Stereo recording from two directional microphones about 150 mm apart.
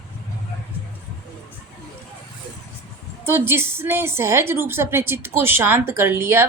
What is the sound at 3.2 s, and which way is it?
A woman's voice, 15° right (ahead or behind).